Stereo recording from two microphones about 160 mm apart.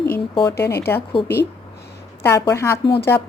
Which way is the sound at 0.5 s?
90° left.